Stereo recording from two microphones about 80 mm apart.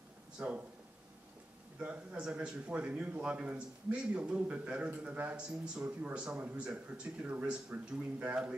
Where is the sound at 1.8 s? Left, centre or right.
Centre.